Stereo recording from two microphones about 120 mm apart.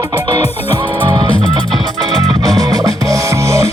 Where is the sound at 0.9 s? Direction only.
35° right (ahead or behind).